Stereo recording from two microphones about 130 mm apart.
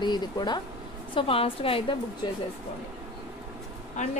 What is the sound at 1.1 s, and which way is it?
A woman's voice, 45° left (ahead or behind).